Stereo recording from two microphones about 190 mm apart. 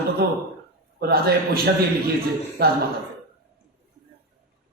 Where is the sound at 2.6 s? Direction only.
55° right (ahead or behind).